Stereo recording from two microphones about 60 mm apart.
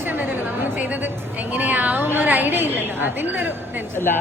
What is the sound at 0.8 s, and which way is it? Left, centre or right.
A woman's voice, right.